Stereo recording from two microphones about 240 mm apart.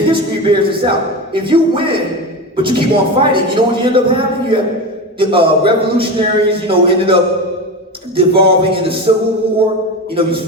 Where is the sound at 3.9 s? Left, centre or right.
Right.